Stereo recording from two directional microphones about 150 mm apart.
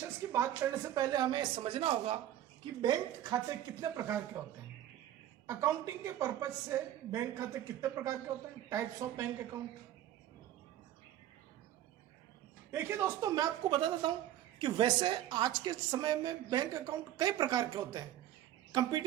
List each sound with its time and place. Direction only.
0.0 s a woman's voice: 15° right (ahead or behind); by 2.1 s 40° right (ahead or behind)
2.8 s a woman's voice: 25° right (ahead or behind)
5.5 s a woman's voice: 20° right (ahead or behind)
12.7 s a woman's voice: 15° right (ahead or behind)